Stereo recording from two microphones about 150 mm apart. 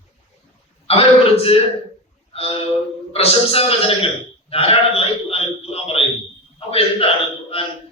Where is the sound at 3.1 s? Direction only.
40° left (ahead or behind).